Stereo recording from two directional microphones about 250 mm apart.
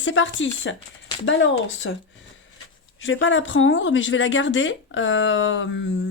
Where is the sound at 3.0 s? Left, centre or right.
Left.